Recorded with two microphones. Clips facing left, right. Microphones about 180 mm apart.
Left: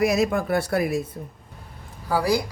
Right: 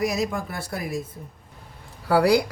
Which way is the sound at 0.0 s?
65° left (ahead or behind).